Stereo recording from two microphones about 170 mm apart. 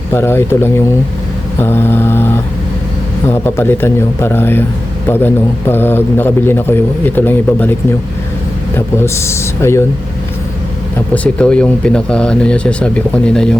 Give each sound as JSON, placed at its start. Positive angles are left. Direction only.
{"t": 0.1, "sound": "a man's voice", "side_deg": 15}
{"t": 11.1, "sound": "speech", "side_deg": 5}